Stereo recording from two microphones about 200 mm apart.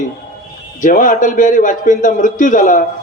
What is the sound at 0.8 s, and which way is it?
A man's voice, 40° left (ahead or behind).